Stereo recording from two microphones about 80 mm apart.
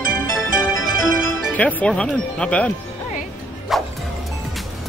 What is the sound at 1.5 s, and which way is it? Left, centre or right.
Speech, centre.